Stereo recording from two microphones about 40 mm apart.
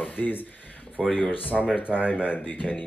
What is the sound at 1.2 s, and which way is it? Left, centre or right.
Speech, left.